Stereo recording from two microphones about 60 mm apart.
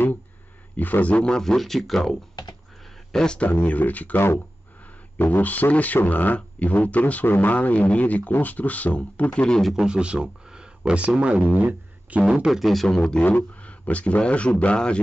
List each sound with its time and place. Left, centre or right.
0.7 s speech: left; by 2.1 s centre
2.8 s a sound: centre
3.3 s speech: left
9.6 s speech: centre
9.8 s speech: centre
11.5 s a sound: right
12.4 s speech: centre
12.8 s speech: centre
13.2 s speech: left